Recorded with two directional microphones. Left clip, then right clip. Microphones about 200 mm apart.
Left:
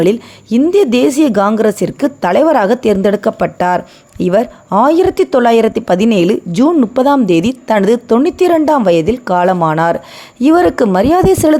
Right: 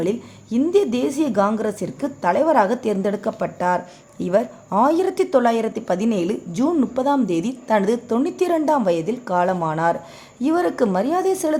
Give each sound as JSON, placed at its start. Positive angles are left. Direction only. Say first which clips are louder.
{"t": 0.0, "sound": "a woman's voice", "louder": "left 11 dB", "side_deg": 35}